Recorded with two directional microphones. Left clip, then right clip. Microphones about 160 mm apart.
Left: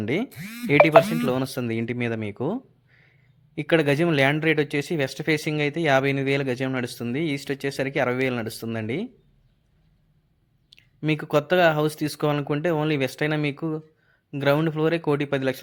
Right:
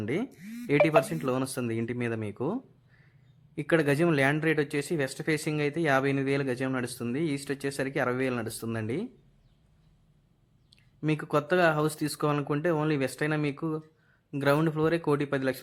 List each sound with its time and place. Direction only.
0.0 s speech: 20° left (ahead or behind)
10.7 s speech: 10° left (ahead or behind)